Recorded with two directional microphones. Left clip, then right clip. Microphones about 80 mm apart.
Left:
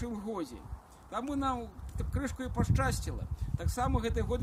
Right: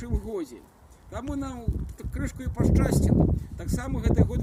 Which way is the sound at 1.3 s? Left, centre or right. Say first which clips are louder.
Left 1 dB; left.